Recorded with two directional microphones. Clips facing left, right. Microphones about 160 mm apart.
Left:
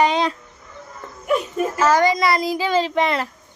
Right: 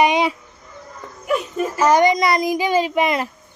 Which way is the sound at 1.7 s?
15° right (ahead or behind).